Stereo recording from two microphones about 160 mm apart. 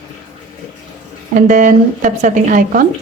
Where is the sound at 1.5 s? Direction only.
55° right (ahead or behind).